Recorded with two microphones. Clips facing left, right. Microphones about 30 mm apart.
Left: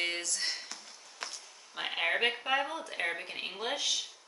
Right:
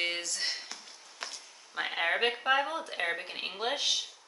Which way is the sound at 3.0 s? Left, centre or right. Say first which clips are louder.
Even; centre.